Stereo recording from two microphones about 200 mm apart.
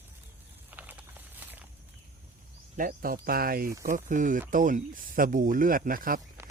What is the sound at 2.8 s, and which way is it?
Speech, 45° right (ahead or behind).